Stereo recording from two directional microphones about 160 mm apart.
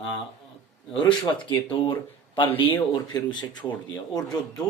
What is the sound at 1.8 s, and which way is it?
Speech, 30° left (ahead or behind).